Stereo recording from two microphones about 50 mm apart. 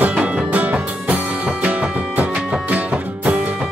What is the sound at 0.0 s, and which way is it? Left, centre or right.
Music, right.